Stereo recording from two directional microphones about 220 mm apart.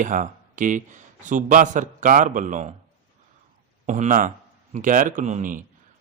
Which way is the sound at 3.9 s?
35° right (ahead or behind).